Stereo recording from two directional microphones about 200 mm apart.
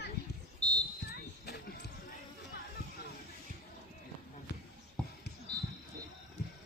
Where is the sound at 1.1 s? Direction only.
55° left (ahead or behind).